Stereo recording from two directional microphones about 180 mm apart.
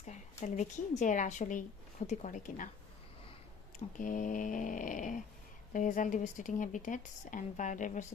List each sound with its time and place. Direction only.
0.0 s speech: 40° left (ahead or behind)
3.9 s speech: 45° left (ahead or behind)